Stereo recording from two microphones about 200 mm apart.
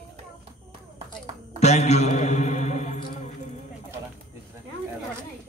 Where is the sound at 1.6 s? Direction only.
35° left (ahead or behind).